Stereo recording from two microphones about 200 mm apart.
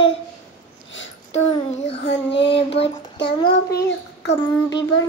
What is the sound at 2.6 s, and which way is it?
Child singing, 30° left (ahead or behind).